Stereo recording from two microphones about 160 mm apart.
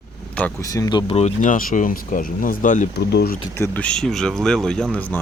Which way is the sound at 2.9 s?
90° left.